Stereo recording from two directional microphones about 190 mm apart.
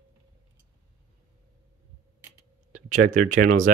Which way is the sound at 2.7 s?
45° right (ahead or behind).